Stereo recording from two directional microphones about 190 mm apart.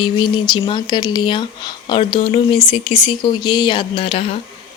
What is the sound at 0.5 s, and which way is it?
Speech, 25° left (ahead or behind).